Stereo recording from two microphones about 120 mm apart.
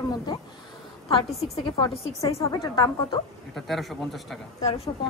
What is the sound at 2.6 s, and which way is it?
Speech, 35° left (ahead or behind).